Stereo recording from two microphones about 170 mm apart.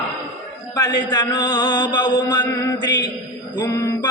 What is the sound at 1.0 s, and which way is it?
Mantra, 25° left (ahead or behind).